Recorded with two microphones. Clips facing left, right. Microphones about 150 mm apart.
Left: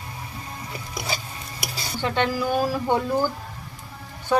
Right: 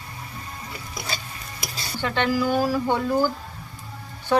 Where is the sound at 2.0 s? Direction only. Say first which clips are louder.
Right 1 dB; 15° left (ahead or behind).